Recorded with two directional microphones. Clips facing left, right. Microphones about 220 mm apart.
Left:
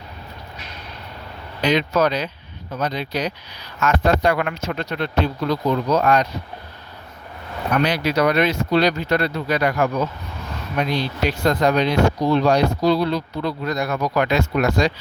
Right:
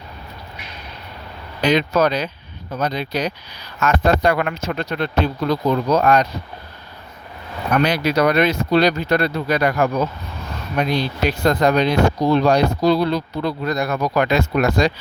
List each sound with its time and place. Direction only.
1.6 s speech: 40° right (ahead or behind)
7.9 s speech: 45° right (ahead or behind)
11.4 s speech: 45° right (ahead or behind)